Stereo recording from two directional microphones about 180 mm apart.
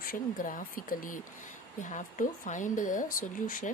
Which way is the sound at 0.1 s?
50° left (ahead or behind).